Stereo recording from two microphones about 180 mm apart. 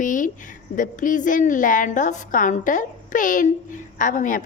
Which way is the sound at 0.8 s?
45° left (ahead or behind).